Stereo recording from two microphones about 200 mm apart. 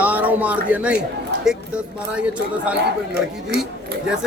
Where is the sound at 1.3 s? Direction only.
55° right (ahead or behind).